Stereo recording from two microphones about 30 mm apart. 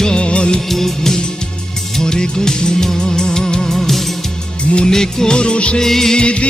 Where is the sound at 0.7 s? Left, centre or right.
Centre.